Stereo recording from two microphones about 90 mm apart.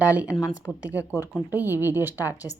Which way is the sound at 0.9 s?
15° right (ahead or behind).